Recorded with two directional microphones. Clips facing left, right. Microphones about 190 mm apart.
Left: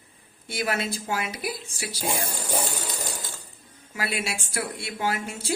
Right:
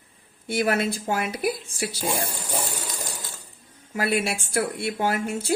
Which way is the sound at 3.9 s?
50° right (ahead or behind).